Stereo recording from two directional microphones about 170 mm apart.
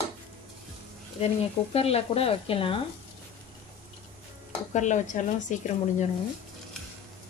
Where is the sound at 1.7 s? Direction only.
35° left (ahead or behind).